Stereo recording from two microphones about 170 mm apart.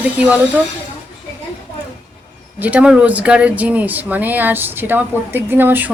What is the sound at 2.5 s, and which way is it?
Speech, 10° right (ahead or behind).